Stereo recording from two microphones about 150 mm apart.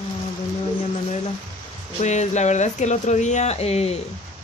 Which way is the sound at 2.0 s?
50° left (ahead or behind).